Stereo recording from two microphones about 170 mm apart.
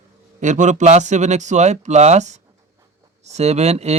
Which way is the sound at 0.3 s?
45° right (ahead or behind).